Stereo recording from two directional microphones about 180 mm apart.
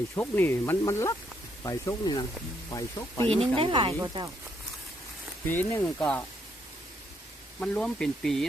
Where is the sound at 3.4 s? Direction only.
30° right (ahead or behind).